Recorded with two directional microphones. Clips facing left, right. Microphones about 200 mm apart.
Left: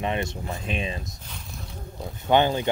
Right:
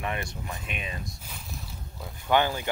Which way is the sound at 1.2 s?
5° right (ahead or behind).